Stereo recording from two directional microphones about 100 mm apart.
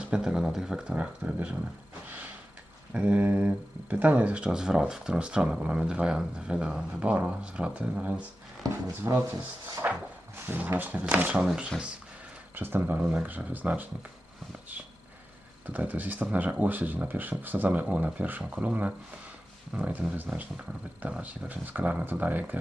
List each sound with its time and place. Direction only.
0.0 s speech: 10° right (ahead or behind)
2.0 s a sound: 15° right (ahead or behind)
2.9 s speech: 10° right (ahead or behind)
8.7 s speech: 35° right (ahead or behind)
9.8 s cupboard open or close: 15° right (ahead or behind)
10.4 s speech: 20° right (ahead or behind); by 11.7 s 5° right (ahead or behind)
12.5 s speech: 20° right (ahead or behind)
15.6 s speech: 15° right (ahead or behind)